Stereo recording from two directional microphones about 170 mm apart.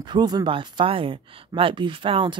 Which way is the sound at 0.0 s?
25° right (ahead or behind).